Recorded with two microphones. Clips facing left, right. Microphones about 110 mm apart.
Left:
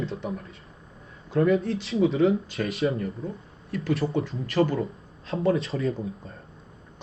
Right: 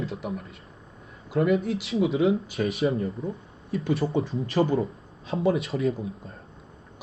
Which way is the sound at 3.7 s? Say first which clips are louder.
Right 1 dB; 25° right (ahead or behind).